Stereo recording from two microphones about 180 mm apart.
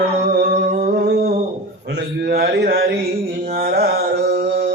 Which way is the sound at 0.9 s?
65° right (ahead or behind).